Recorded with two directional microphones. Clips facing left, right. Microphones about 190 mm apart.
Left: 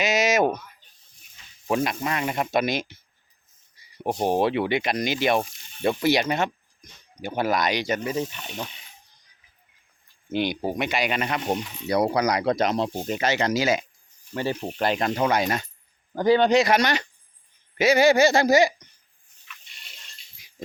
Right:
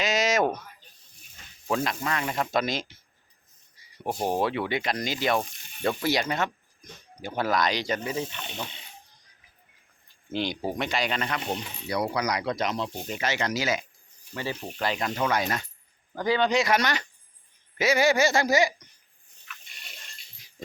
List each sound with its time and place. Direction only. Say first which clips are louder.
0.0 s a sound: left 3 dB; 5° left (ahead or behind)
1.6 s speech: left 3 dB; 15° left (ahead or behind)
4.0 s speech: left 4 dB; 25° left (ahead or behind)
10.6 s speech: left 3 dB; 15° left (ahead or behind)
11.4 s speech: left 5 dB; 40° left (ahead or behind)
14.3 s speech: left 6 dB; 45° left (ahead or behind)
15.2 s speech: left 2 dB; 30° left (ahead or behind)
16.3 s speech: left 6 dB; 60° left (ahead or behind)
16.6 s speech: left 4 dB; 30° left (ahead or behind)